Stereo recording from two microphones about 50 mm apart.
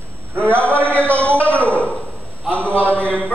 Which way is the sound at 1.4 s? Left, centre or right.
Left.